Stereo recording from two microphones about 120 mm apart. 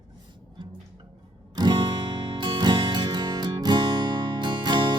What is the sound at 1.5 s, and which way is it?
Music, 40° right (ahead or behind).